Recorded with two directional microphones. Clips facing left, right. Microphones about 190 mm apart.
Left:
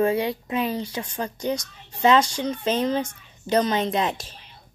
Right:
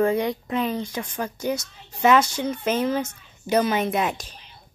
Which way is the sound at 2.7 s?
15° left (ahead or behind).